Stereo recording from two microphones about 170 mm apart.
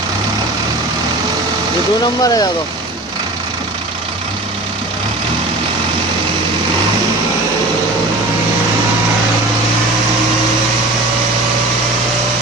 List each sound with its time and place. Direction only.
2.2 s speech: 20° left (ahead or behind)